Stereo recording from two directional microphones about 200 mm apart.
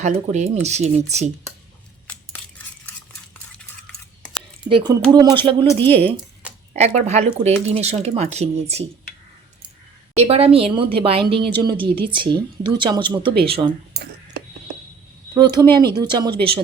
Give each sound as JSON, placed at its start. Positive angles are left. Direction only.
{"t": 0.0, "sound": "speech", "side_deg": -35}
{"t": 4.7, "sound": "a woman's voice", "side_deg": -20}
{"t": 5.6, "sound": "speech", "side_deg": 10}
{"t": 6.7, "sound": "speech", "side_deg": -35}
{"t": 10.2, "sound": "a woman's voice", "side_deg": -30}
{"t": 15.4, "sound": "a woman's voice", "side_deg": -20}